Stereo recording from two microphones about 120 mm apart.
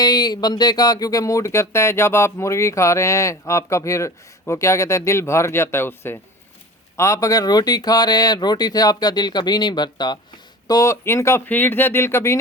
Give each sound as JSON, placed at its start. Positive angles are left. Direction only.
{"t": 0.0, "sound": "speech", "side_deg": 35}